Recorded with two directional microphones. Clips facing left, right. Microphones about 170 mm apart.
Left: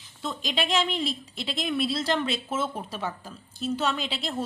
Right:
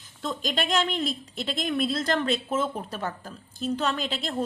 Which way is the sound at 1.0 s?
45° right (ahead or behind).